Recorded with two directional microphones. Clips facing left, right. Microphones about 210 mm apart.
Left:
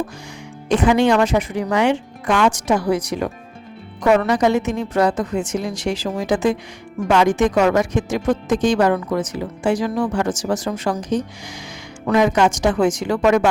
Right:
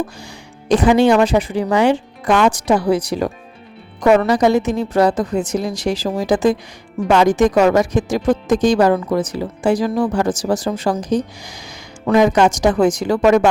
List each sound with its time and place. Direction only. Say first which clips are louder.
0.7 s speech: right 3 dB; 35° right (ahead or behind)